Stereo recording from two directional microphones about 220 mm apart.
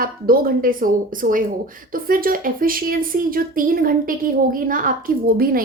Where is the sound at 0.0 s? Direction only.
40° right (ahead or behind).